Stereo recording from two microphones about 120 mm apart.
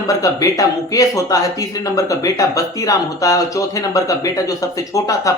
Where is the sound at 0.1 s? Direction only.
30° left (ahead or behind).